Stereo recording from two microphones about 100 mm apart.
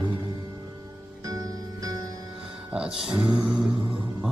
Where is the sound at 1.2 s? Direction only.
35° right (ahead or behind).